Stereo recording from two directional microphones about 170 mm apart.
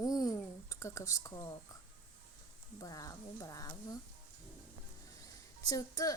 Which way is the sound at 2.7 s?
20° left (ahead or behind).